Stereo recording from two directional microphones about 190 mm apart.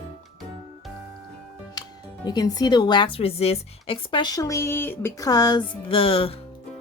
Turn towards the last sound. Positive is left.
turn(degrees=30)  # may be behind; listen again after turning